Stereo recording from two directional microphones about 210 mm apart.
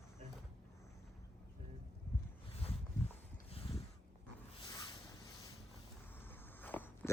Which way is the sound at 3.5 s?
25° left (ahead or behind).